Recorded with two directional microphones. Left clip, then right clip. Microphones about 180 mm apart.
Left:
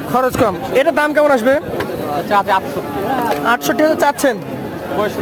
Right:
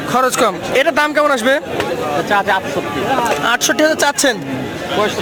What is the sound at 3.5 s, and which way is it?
Speech, 5° right (ahead or behind).